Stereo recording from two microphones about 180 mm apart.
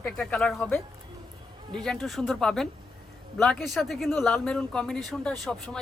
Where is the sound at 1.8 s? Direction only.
Centre (ahead or behind).